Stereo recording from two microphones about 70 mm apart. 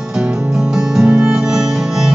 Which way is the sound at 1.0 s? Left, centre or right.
Centre.